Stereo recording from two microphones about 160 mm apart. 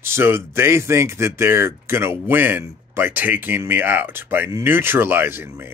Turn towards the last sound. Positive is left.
turn(degrees=-15)  # may be behind; listen again after turning